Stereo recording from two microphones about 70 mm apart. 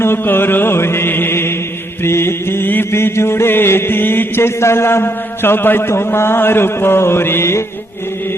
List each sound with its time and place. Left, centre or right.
0.0 s mantra: left